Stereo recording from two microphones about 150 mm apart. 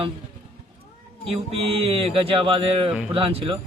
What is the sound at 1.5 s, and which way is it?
Speech, 40° right (ahead or behind).